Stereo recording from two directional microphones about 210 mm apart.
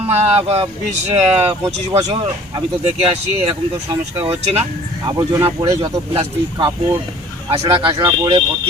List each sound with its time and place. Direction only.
0.1 s speech: 30° right (ahead or behind)